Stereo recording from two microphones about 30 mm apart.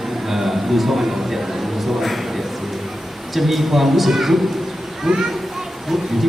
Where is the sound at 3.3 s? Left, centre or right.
Centre.